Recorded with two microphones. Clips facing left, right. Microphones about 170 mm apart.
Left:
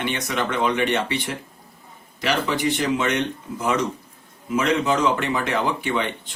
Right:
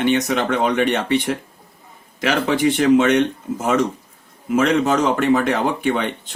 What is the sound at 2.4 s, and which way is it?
Speech, 60° right (ahead or behind).